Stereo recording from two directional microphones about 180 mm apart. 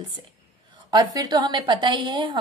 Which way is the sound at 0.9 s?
20° right (ahead or behind).